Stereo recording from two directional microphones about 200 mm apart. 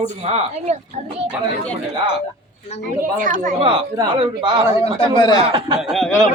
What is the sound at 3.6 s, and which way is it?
A man's voice, 25° right (ahead or behind).